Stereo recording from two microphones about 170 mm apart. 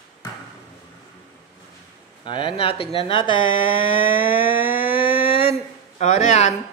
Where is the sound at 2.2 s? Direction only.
30° left (ahead or behind).